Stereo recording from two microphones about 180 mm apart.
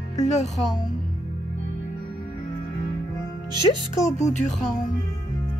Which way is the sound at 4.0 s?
40° left (ahead or behind).